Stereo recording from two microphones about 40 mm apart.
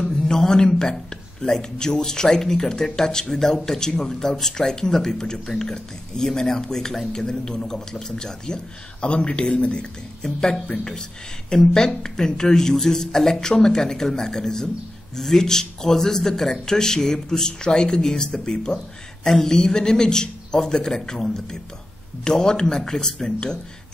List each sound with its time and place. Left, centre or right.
0.0 s a man's voice: centre; by 9.8 s left
10.2 s a man's voice: centre